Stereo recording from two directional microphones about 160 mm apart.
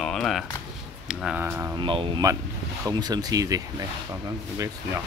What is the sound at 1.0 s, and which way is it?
Speech, 5° right (ahead or behind).